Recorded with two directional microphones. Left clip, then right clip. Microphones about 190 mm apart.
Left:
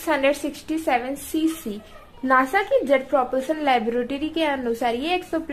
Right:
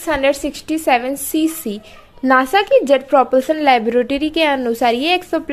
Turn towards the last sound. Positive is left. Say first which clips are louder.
# right 7 dB
turn(degrees=-30)  # may be behind; listen again after turning